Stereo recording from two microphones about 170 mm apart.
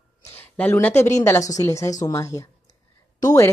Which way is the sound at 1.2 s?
15° left (ahead or behind).